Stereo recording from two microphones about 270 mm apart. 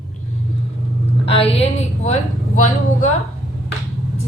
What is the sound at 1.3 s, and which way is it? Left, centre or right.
A woman's voice, left.